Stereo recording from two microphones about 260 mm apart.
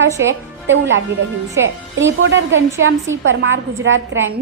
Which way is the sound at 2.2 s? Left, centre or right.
Right.